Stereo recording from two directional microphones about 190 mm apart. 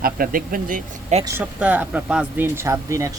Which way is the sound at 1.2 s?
10° right (ahead or behind).